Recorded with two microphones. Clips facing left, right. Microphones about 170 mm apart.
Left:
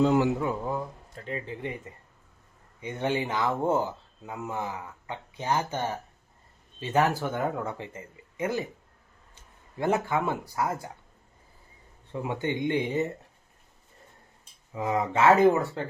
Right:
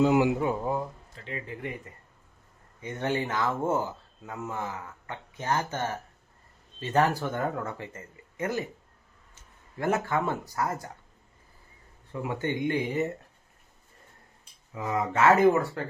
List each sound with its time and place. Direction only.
0.0 s speech: 10° right (ahead or behind)
1.1 s speech: 45° left (ahead or behind)
1.5 s speech: 25° left (ahead or behind)
2.8 s speech: 10° left (ahead or behind)
9.7 s speech: 15° left (ahead or behind)
12.1 s speech: 20° left (ahead or behind)
14.8 s speech: 20° left (ahead or behind)